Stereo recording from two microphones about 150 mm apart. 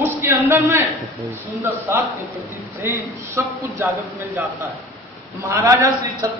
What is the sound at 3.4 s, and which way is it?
Speech, 15° right (ahead or behind).